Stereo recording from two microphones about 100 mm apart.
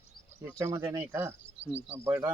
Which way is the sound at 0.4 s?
25° right (ahead or behind).